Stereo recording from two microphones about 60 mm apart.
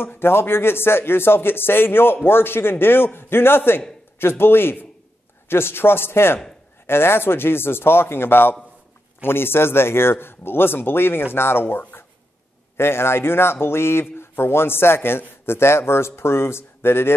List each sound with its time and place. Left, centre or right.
0.0 s a man's voice: left